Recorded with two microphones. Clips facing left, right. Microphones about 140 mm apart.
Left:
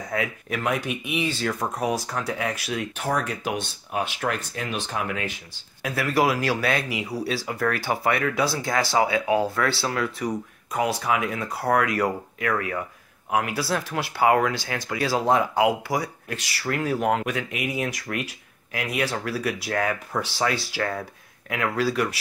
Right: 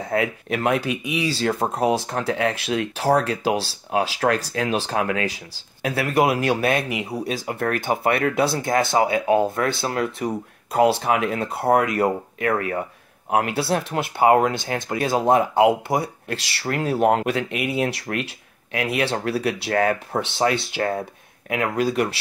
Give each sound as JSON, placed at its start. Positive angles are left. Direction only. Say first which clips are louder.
{"t": 0.7, "sound": "speech", "louder": "right 4 dB", "side_deg": -30}
{"t": 4.1, "sound": "speech", "louder": "right 7 dB", "side_deg": -90}
{"t": 4.9, "sound": "speech", "louder": "right 4 dB", "side_deg": -75}
{"t": 5.2, "sound": "speech", "louder": "right 6 dB", "side_deg": -35}